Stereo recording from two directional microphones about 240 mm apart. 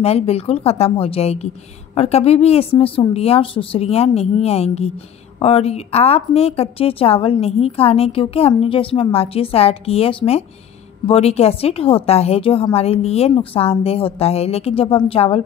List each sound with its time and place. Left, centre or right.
0.0 s a woman's voice: left